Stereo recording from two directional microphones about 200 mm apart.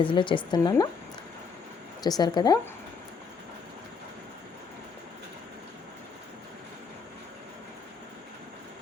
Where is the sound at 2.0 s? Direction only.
20° left (ahead or behind).